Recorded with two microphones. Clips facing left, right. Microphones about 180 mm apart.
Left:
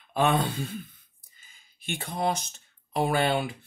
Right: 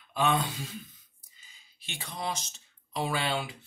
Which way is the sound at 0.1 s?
60° left (ahead or behind).